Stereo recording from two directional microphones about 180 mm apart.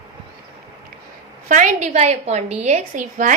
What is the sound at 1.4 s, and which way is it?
A woman's voice, 45° right (ahead or behind).